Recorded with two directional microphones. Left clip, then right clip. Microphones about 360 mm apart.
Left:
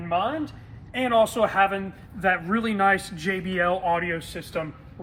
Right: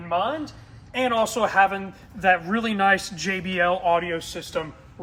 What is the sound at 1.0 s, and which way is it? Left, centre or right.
A man's voice, centre.